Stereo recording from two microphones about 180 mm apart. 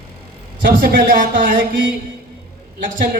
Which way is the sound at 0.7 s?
50° right (ahead or behind).